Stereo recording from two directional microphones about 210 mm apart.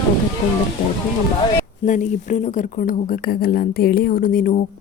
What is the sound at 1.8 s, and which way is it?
Speech, 35° left (ahead or behind).